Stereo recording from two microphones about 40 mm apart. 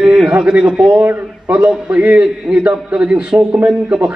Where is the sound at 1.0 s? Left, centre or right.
Right.